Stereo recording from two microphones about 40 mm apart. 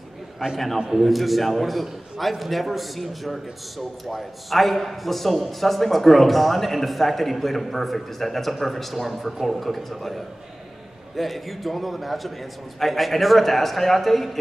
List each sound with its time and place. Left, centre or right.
0.4 s a man's voice: centre